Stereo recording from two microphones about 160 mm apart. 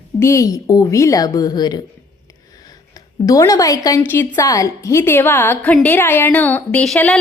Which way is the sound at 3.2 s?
20° left (ahead or behind).